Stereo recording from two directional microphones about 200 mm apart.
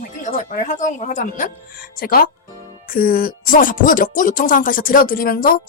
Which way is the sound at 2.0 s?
50° left (ahead or behind).